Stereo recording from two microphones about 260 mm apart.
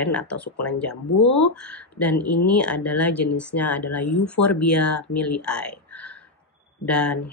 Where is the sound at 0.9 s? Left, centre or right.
Left.